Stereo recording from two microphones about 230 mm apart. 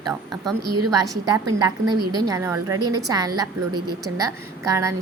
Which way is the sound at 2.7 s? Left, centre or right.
Right.